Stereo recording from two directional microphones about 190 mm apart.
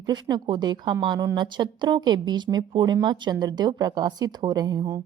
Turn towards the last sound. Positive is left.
turn(degrees=-20)  # may be behind; listen again after turning